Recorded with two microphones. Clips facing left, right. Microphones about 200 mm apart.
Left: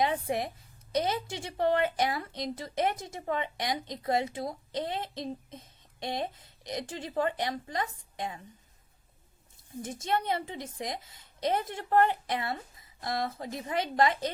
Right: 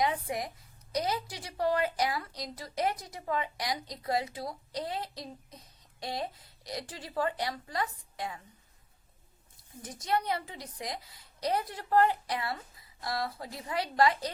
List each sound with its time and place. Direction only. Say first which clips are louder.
0.0 s a woman's voice: left 2 dB; 25° left (ahead or behind)
9.8 s a woman's voice: left 1 dB; 25° left (ahead or behind)